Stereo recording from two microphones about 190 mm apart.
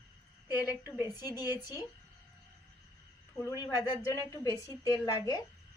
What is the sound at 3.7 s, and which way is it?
A woman's voice, 20° left (ahead or behind).